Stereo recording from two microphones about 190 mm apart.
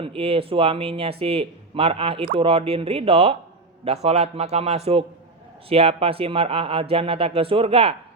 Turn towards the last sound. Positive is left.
turn(degrees=-30)  # may be behind; listen again after turning